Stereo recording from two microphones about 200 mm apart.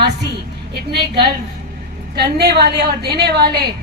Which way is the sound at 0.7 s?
55° right (ahead or behind).